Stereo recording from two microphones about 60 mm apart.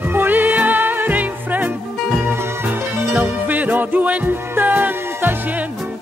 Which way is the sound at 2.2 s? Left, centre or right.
Right.